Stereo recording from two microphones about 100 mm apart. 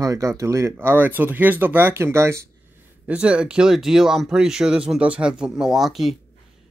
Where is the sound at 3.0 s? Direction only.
15° right (ahead or behind).